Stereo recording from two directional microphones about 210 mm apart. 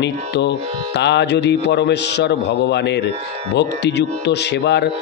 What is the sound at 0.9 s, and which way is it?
A man's voice, 55° left (ahead or behind).